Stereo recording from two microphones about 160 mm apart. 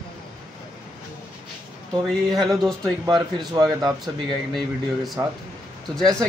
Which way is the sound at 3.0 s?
25° right (ahead or behind).